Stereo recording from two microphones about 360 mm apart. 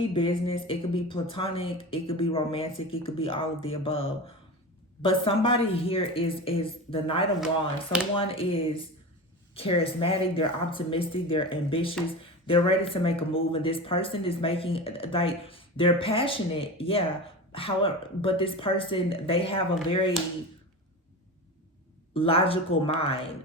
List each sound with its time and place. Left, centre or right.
0.0 s speech: centre
22.1 s speech: centre